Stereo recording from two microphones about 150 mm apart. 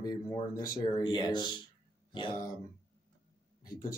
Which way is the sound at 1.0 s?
30° left (ahead or behind).